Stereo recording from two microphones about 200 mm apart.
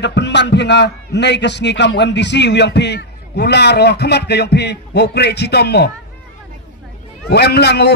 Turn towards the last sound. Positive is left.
turn(degrees=55)  # may be behind; listen again after turning